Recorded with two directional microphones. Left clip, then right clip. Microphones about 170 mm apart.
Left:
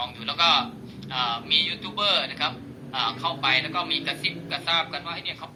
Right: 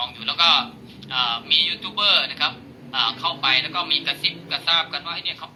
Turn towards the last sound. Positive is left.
turn(degrees=10)  # may be behind; listen again after turning